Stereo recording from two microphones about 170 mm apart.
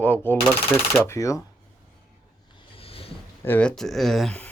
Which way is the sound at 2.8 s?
35° left (ahead or behind).